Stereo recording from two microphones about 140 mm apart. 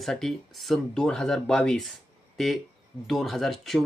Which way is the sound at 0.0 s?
Centre (ahead or behind).